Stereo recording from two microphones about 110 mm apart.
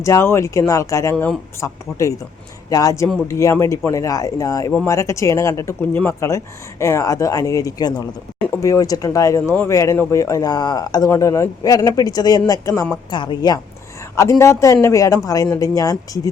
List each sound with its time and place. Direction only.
0.0 s a man's voice: 25° left (ahead or behind)
13.1 s a woman's voice: 45° left (ahead or behind)
14.2 s a man's voice: 25° left (ahead or behind)